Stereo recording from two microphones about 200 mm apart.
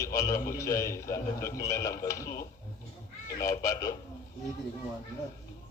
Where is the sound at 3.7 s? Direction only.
15° left (ahead or behind).